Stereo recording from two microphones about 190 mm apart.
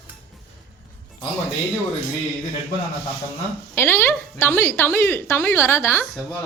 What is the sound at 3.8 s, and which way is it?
A woman's voice, 10° left (ahead or behind).